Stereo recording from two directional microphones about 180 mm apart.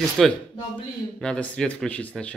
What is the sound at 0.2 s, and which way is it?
Speech, centre (ahead or behind).